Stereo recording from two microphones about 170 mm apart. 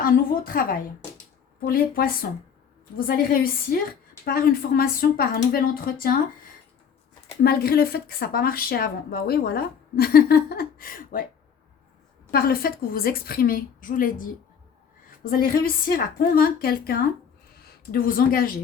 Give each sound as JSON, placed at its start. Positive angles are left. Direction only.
{"t": 0.0, "sound": "a sound", "side_deg": 55}
{"t": 1.6, "sound": "speech", "side_deg": 60}
{"t": 7.4, "sound": "speech", "side_deg": 65}
{"t": 12.3, "sound": "speech", "side_deg": 60}